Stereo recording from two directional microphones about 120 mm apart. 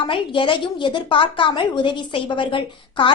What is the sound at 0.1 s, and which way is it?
A woman's voice, 45° left (ahead or behind).